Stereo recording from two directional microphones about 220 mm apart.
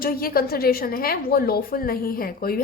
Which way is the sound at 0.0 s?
40° left (ahead or behind).